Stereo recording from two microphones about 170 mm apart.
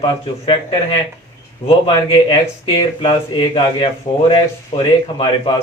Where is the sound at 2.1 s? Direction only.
25° left (ahead or behind).